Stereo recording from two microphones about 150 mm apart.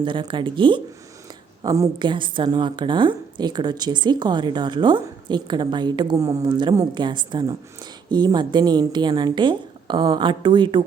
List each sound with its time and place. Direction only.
0.0 s a woman's voice: 30° right (ahead or behind)
1.6 s a woman's voice: 20° right (ahead or behind)